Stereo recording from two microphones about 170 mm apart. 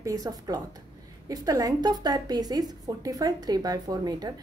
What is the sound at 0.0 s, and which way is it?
A woman's voice, 20° right (ahead or behind).